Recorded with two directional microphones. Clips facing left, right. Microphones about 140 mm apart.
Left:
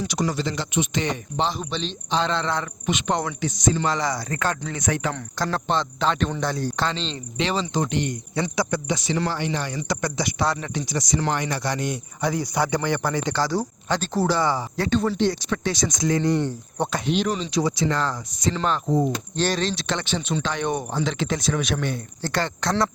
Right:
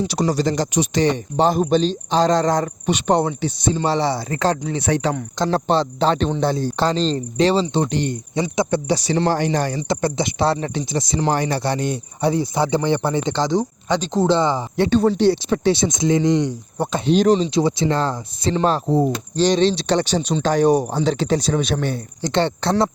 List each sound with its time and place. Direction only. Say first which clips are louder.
0.0 s speech: right 6 dB; 30° right (ahead or behind)
1.5 s speech: right 11 dB; 45° right (ahead or behind)
8.4 s speech: right 4 dB; 20° right (ahead or behind)
8.9 s speech: right 6 dB; 35° right (ahead or behind)
9.9 s speech: right 3 dB; 25° right (ahead or behind)
17.1 s speech: right 12 dB; 35° right (ahead or behind)